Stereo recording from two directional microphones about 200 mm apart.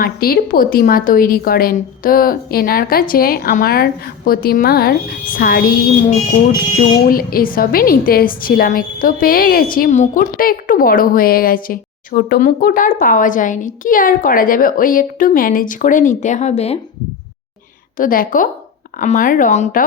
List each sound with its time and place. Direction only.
0.0 s a woman's voice: 45° left (ahead or behind)
7.1 s a woman's voice: 45° left (ahead or behind)
17.9 s a woman's voice: 45° left (ahead or behind)